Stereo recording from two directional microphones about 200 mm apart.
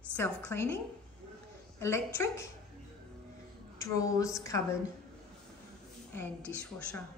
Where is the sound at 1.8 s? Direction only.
15° left (ahead or behind).